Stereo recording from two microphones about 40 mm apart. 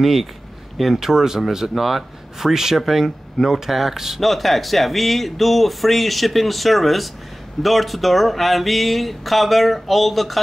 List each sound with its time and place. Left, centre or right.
0.0 s speech: centre